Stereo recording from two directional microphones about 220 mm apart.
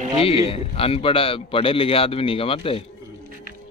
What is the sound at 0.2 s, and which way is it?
A man's voice, 25° left (ahead or behind).